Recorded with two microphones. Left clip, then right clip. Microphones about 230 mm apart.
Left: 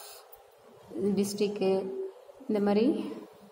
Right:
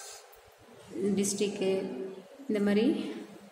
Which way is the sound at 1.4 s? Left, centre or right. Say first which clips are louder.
Left 2 dB; centre.